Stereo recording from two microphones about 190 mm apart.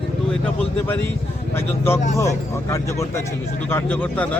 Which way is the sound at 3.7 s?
10° left (ahead or behind).